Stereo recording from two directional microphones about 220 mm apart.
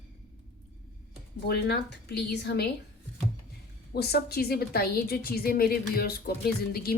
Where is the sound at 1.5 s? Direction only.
50° left (ahead or behind).